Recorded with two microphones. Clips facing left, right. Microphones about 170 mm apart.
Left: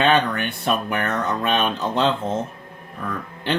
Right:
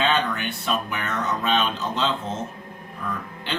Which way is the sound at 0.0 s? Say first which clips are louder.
Left 4 dB; 60° left (ahead or behind).